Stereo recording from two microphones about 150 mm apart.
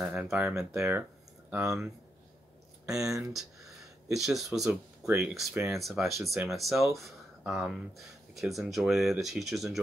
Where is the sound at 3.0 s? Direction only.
20° right (ahead or behind).